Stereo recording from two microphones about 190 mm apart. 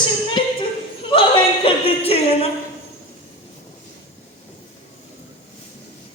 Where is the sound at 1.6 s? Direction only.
30° left (ahead or behind).